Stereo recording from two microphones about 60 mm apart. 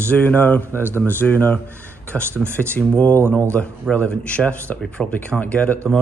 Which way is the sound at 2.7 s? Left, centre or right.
Left.